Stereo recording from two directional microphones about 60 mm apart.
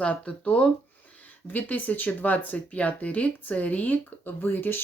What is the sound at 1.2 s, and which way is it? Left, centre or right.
Speech, left.